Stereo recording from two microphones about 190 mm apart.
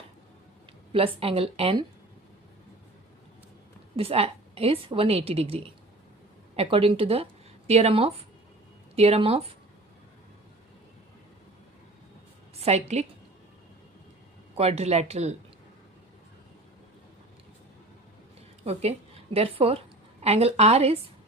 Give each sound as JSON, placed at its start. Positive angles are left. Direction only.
{"t": 0.9, "sound": "a woman's voice", "side_deg": -30}
{"t": 3.9, "sound": "a woman's voice", "side_deg": -30}
{"t": 12.5, "sound": "a woman's voice", "side_deg": -35}
{"t": 14.5, "sound": "a woman's voice", "side_deg": -35}
{"t": 18.6, "sound": "a woman's voice", "side_deg": -35}